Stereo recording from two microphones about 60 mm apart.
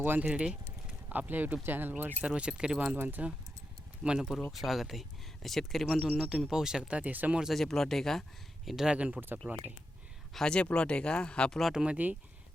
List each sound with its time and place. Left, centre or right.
0.0 s speech: right
2.2 s speech: centre
3.0 s speech: right
4.0 s speech: centre
6.0 s speech: centre
7.5 s speech: centre
8.6 s speech: centre
9.0 s speech: right
10.3 s speech: centre
11.6 s speech: centre